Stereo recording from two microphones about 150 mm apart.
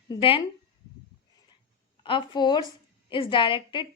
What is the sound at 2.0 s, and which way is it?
A woman's voice, 35° left (ahead or behind).